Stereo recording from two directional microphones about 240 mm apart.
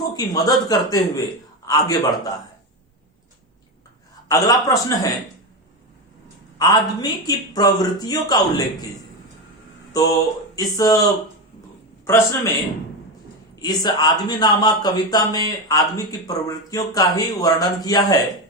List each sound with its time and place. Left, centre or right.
0.0 s speech: centre
4.3 s speech: centre
6.6 s speech: centre
9.9 s a sound: centre
12.0 s speech: centre
13.6 s speech: centre